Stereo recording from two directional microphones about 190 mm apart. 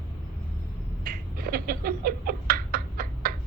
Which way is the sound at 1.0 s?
50° right (ahead or behind).